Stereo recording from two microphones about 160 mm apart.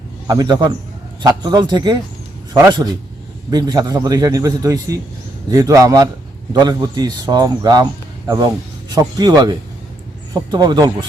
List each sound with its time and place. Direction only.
0.3 s a man's voice: 25° right (ahead or behind)
8.9 s a man's voice: 25° right (ahead or behind)